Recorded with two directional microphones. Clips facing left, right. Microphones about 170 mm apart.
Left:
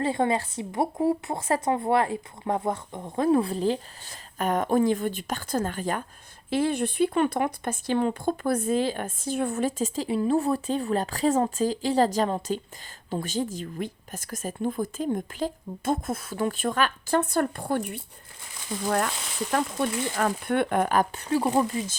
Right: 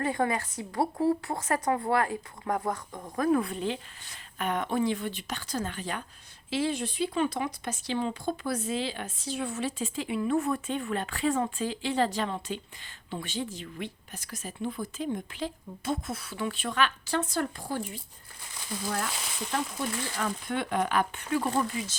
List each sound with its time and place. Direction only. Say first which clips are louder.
0.0 s a woman's voice: left 4 dB; 25° left (ahead or behind)
21.4 s a woman's voice: left 6 dB; 20° left (ahead or behind)